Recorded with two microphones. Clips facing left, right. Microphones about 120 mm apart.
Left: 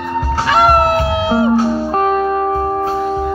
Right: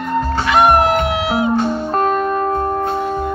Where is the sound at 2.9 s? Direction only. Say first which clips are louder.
Left 2 dB; 5° left (ahead or behind).